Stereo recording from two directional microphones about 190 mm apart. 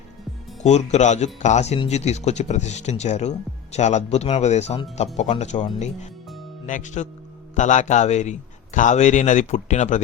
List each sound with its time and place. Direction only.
0.6 s speech: 35° left (ahead or behind)
6.7 s speech: 40° left (ahead or behind)